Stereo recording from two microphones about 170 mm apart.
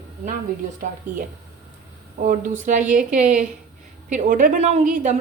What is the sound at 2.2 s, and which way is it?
A woman's voice, 50° right (ahead or behind).